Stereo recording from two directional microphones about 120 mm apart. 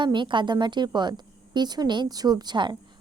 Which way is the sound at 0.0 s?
40° right (ahead or behind).